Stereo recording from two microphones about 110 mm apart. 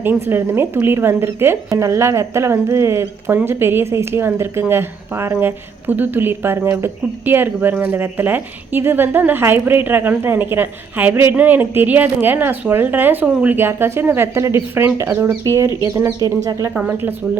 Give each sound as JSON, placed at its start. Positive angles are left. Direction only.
{"t": 0.0, "sound": "a woman's voice", "side_deg": -20}
{"t": 16.7, "sound": "a woman's voice", "side_deg": -15}